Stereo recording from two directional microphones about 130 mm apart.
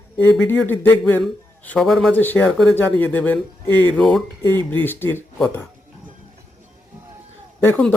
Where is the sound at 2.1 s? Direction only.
15° left (ahead or behind).